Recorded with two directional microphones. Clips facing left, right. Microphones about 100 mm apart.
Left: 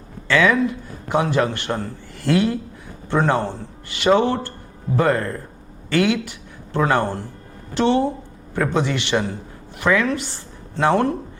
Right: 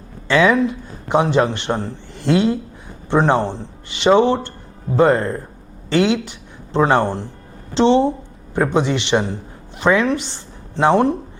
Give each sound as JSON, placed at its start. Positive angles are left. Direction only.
{"t": 0.3, "sound": "a man's voice", "side_deg": -20}